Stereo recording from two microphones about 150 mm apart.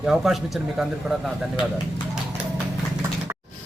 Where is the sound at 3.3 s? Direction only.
25° right (ahead or behind).